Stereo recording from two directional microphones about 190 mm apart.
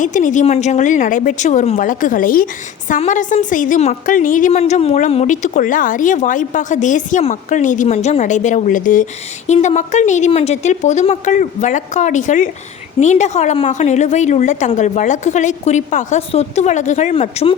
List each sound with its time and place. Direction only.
0.0 s speech: 40° left (ahead or behind)